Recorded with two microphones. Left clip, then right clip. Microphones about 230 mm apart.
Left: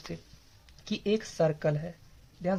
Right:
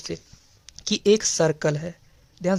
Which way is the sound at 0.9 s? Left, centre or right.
Right.